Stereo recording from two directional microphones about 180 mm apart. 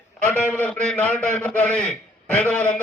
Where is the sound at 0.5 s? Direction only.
10° left (ahead or behind).